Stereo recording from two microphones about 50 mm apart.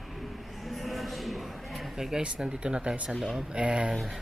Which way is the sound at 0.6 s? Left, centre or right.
Centre.